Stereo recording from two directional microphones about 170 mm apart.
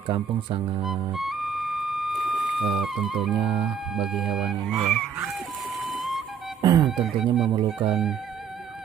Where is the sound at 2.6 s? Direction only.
5° right (ahead or behind).